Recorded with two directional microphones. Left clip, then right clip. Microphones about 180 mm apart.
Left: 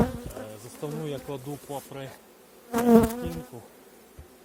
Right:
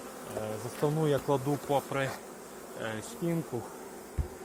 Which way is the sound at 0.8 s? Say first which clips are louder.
Right 6 dB; 5° left (ahead or behind).